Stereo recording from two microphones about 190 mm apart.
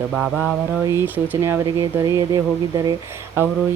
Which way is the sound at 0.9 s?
10° right (ahead or behind).